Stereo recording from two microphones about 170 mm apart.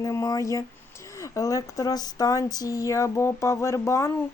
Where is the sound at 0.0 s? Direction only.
20° left (ahead or behind).